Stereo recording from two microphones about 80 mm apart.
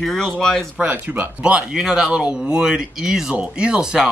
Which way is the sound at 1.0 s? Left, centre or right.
Right.